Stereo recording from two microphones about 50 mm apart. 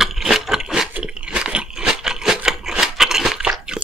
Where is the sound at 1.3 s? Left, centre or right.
Centre.